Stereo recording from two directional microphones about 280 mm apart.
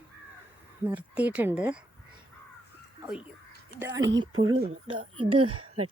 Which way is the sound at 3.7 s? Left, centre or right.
Centre.